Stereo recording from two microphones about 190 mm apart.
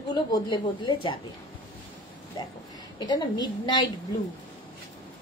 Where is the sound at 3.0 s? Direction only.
20° left (ahead or behind).